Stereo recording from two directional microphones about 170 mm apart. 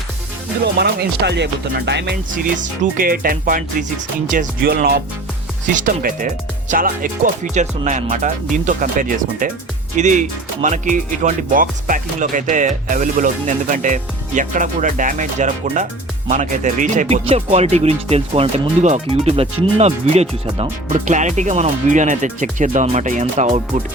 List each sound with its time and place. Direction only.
0.6 s music: 75° right (ahead or behind)
2.3 s speech: 55° right (ahead or behind)
5.7 s speech: 55° right (ahead or behind)